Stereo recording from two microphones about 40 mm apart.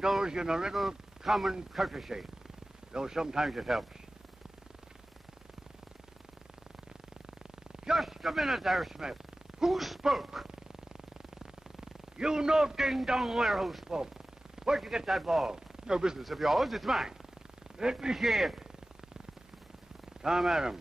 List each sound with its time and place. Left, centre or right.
0.0 s speech: centre
0.7 s speech: centre
3.4 s speech: centre
8.0 s speech: centre
8.9 s a sound: centre
9.7 s speech: centre
11.8 s a sound: centre
12.6 s speech: centre
13.8 s speech: centre
15.0 s speech: centre
16.2 s speech: centre
17.7 s speech: centre
20.2 s a sound: centre
20.4 s speech: centre